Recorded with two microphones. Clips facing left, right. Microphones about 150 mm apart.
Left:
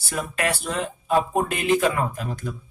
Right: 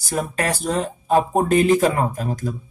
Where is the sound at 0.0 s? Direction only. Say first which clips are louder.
Right 3 dB; 40° right (ahead or behind).